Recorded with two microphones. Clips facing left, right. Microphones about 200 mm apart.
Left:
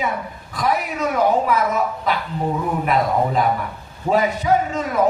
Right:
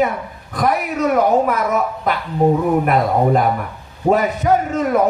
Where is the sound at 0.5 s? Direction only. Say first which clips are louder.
Right 3 dB; 50° right (ahead or behind).